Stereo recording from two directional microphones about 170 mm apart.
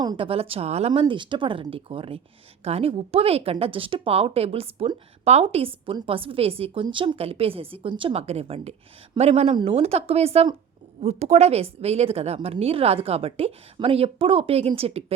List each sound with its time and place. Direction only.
0.0 s speech: 30° right (ahead or behind)